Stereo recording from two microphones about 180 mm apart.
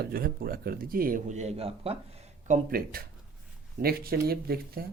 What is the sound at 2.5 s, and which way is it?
Speech, 55° right (ahead or behind).